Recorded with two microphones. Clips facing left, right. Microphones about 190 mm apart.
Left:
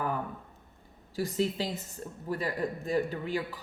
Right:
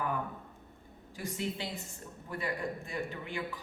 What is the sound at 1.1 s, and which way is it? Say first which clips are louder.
Speech: left 7 dB; 35° left (ahead or behind).